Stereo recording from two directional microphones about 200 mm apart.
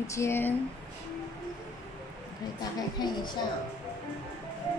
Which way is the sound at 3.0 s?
20° left (ahead or behind).